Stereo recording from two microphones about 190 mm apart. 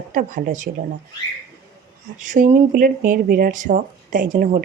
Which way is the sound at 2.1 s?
40° right (ahead or behind).